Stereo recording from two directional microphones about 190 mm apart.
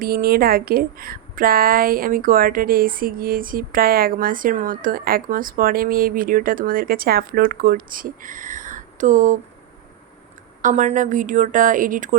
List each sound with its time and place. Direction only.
0.0 s a woman's voice: 50° right (ahead or behind)
10.6 s a woman's voice: 40° right (ahead or behind)